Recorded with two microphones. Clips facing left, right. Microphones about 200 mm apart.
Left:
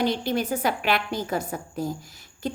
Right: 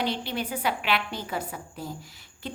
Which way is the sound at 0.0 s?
45° left (ahead or behind).